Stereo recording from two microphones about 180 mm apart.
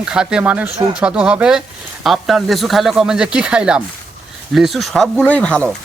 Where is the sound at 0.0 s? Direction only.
5° right (ahead or behind).